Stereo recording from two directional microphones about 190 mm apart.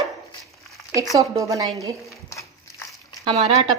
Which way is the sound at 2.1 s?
15° left (ahead or behind).